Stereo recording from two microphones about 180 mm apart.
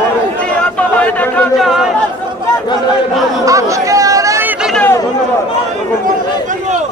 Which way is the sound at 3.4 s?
20° right (ahead or behind).